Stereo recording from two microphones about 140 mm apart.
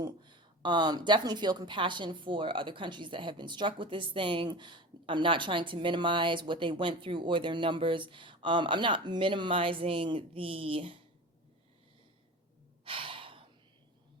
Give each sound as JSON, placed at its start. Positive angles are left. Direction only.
{"t": 0.0, "sound": "a woman's voice", "side_deg": -35}
{"t": 12.8, "sound": "gasp", "side_deg": -40}